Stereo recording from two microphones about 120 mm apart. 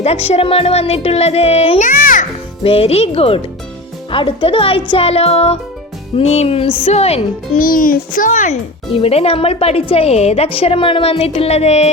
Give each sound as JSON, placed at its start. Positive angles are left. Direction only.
{"t": 0.0, "sound": "speech", "side_deg": 60}
{"t": 1.8, "sound": "music", "side_deg": 90}
{"t": 2.6, "sound": "speech", "side_deg": 55}
{"t": 4.1, "sound": "speech", "side_deg": 45}
{"t": 8.2, "sound": "speech", "side_deg": 90}
{"t": 8.9, "sound": "speech", "side_deg": 55}